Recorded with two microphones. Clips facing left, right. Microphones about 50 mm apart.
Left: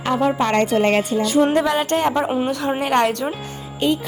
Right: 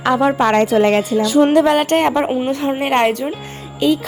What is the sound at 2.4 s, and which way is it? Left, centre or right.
Speech, right.